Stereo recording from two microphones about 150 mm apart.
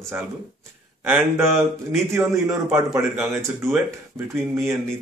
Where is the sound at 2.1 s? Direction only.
15° right (ahead or behind).